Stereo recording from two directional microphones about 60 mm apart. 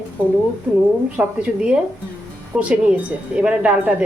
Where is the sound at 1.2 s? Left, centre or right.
Right.